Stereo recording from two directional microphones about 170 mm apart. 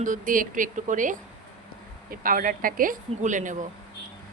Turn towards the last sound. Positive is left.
turn(degrees=-50)  # may be behind; listen again after turning